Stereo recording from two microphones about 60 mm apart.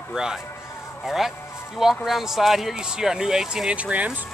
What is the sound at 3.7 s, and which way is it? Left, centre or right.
Speech, right.